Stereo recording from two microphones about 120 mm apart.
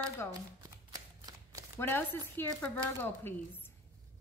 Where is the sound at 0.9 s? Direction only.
30° right (ahead or behind).